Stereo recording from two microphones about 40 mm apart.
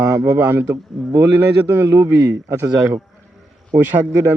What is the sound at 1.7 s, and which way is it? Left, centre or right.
A man's voice, right.